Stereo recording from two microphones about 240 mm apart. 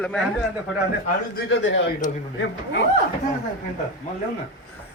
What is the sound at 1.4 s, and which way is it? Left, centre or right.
Speech, left.